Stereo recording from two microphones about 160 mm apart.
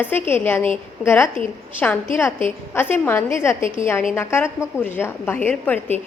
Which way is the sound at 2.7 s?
15° left (ahead or behind).